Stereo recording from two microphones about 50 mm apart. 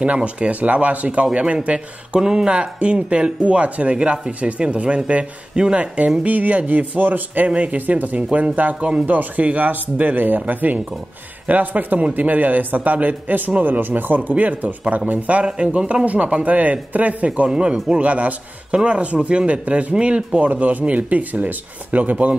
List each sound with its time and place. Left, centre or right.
0.0 s speech: right
2.1 s a man's voice: centre
17.5 s speech: centre
18.0 s speech: right
22.1 s speech: right